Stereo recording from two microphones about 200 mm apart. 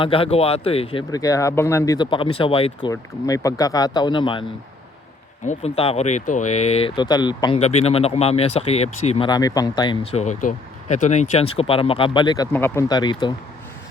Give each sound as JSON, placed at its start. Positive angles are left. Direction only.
{"t": 0.0, "sound": "speech", "side_deg": 25}
{"t": 2.9, "sound": "speech", "side_deg": 15}
{"t": 5.5, "sound": "speech", "side_deg": 30}